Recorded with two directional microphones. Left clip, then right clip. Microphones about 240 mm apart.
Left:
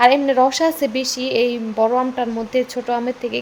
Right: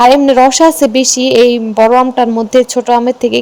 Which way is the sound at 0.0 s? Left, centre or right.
Right.